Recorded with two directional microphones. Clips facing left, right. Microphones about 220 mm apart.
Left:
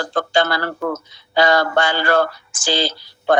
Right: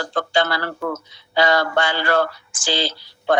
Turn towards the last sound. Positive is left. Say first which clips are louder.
# left 2 dB
turn(degrees=45)  # may be behind; listen again after turning